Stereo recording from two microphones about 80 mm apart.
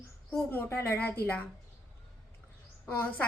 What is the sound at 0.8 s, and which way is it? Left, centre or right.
Speech, left.